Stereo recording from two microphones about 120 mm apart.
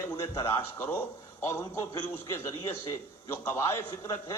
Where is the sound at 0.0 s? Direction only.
25° left (ahead or behind).